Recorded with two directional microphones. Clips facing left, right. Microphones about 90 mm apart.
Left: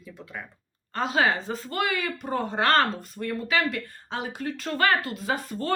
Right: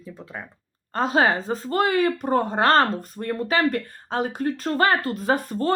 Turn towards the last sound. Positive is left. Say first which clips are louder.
# right 6 dB
turn(degrees=-45)  # may be behind; listen again after turning